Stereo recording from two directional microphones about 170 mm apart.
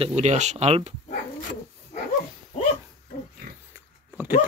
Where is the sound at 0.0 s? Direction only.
40° right (ahead or behind).